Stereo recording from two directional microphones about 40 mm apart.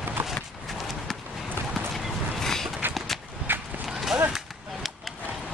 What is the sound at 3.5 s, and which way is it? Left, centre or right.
Horse, right.